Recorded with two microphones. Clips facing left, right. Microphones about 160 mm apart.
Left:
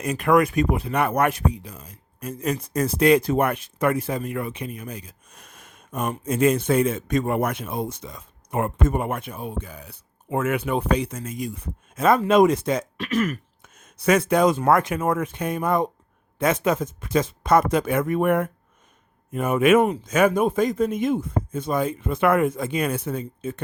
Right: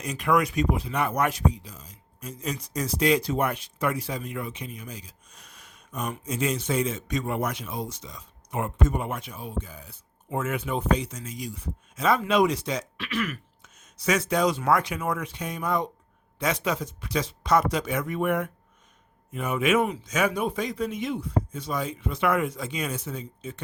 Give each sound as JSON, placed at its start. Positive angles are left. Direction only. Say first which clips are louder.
{"t": 0.0, "sound": "a man's voice", "louder": "left 5 dB", "side_deg": 55}